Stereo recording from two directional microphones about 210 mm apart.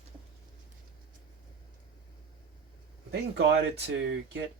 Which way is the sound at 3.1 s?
55° right (ahead or behind).